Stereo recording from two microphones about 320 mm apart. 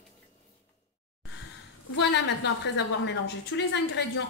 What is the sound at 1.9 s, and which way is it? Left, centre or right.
A woman's voice, left.